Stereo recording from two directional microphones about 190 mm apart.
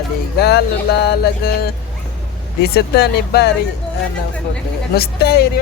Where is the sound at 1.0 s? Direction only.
60° left (ahead or behind).